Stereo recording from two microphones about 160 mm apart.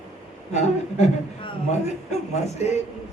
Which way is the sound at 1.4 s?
45° left (ahead or behind).